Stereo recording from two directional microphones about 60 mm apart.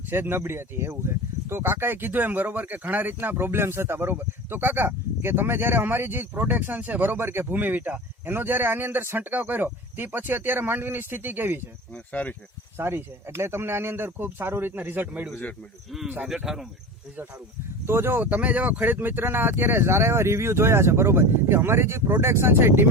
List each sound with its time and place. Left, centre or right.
0.1 s speech: right
12.7 s speech: right
17.8 s speech: right
18.2 s speech: right